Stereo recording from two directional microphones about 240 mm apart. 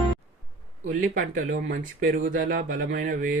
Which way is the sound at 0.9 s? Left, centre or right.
Right.